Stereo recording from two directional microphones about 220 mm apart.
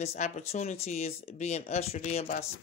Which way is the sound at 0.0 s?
30° left (ahead or behind).